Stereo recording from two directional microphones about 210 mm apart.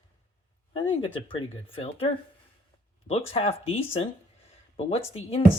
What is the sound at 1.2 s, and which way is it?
Speech, 25° left (ahead or behind).